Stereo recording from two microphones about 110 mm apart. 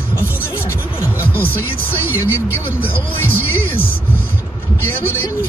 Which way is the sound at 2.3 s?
20° left (ahead or behind).